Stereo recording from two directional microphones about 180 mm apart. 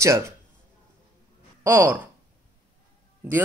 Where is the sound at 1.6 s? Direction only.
15° right (ahead or behind).